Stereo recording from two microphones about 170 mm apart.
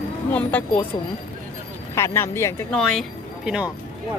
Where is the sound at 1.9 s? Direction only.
15° left (ahead or behind).